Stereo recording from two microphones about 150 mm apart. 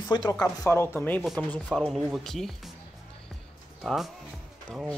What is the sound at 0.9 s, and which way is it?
Speech, 10° left (ahead or behind).